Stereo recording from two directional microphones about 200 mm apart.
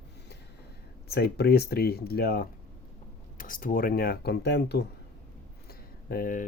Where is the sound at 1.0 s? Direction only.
55° left (ahead or behind).